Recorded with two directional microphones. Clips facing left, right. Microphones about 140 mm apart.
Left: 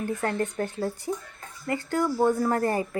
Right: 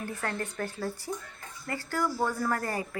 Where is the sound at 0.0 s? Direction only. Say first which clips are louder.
Left 7 dB; 20° left (ahead or behind).